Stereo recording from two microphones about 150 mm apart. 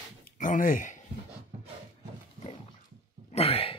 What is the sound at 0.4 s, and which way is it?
Speech, 65° left (ahead or behind).